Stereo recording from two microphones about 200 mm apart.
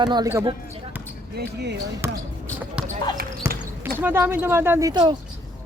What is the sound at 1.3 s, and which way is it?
Speech, 55° right (ahead or behind).